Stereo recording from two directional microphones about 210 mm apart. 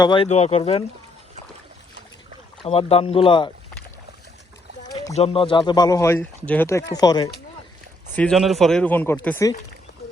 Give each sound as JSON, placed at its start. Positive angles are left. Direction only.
{"t": 0.0, "sound": "speech", "side_deg": 25}
{"t": 2.6, "sound": "speech", "side_deg": 25}
{"t": 5.1, "sound": "speech", "side_deg": 30}
{"t": 8.1, "sound": "speech", "side_deg": 5}